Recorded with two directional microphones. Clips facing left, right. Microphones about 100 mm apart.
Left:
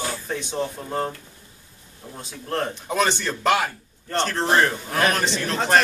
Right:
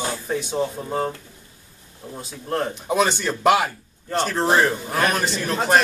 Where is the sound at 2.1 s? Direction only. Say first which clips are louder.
Right 2 dB; 5° right (ahead or behind).